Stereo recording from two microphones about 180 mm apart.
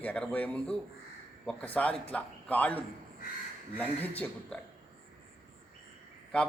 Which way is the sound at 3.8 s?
10° left (ahead or behind).